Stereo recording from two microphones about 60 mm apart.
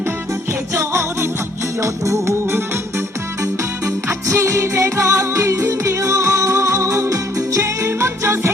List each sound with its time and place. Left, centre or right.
0.8 s music: right
4.3 s music: right